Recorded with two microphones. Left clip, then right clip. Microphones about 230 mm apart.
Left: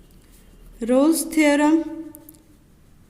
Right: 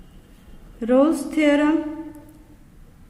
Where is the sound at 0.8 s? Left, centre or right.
Left.